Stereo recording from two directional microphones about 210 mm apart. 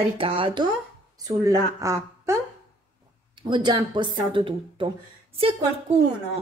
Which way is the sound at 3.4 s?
20° right (ahead or behind).